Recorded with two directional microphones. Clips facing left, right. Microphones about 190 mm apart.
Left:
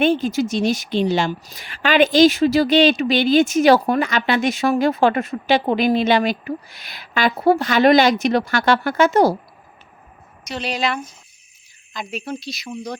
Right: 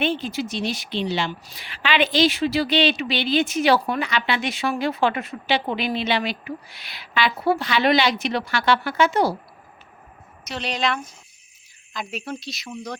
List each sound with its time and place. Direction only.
0.0 s a woman's voice: 45° left (ahead or behind)
10.4 s speech: centre (ahead or behind)